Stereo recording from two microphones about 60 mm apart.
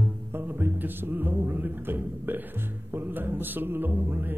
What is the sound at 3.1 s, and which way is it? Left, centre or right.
Speech, right.